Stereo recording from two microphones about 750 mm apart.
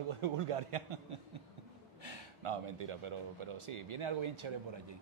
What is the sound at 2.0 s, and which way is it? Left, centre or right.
Speech, right.